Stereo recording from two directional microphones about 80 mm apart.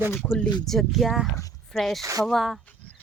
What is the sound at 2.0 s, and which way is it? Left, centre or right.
Speech, right.